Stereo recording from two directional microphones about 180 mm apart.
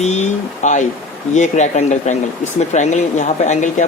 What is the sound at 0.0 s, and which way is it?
Speech, 40° left (ahead or behind).